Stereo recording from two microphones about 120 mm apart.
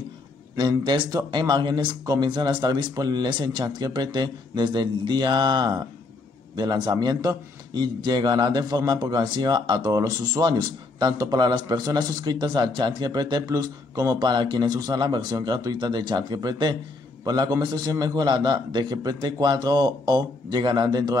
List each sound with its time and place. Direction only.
0.6 s a man's voice: 40° right (ahead or behind)